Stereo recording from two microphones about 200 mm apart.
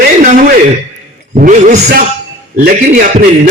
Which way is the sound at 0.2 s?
40° right (ahead or behind).